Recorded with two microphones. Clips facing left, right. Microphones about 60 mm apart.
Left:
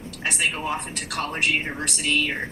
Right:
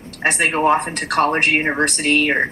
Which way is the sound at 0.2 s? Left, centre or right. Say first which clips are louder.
Right 9 dB; right.